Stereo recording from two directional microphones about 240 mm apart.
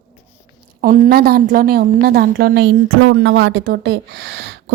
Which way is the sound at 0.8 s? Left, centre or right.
Right.